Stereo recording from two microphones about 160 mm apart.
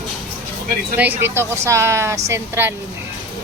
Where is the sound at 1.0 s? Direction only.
15° right (ahead or behind).